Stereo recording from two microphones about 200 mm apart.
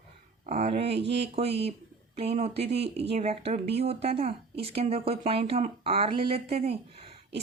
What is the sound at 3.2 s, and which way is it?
Speech, 30° right (ahead or behind).